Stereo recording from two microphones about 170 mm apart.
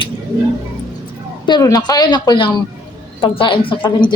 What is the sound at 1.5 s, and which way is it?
Speech, 25° left (ahead or behind).